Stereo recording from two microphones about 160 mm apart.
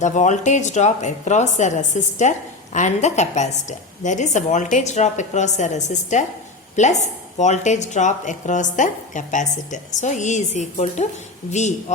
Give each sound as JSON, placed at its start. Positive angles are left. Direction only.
{"t": 0.0, "sound": "a woman's voice", "side_deg": 50}